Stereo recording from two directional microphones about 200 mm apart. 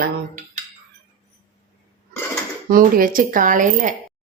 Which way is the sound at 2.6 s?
45° right (ahead or behind).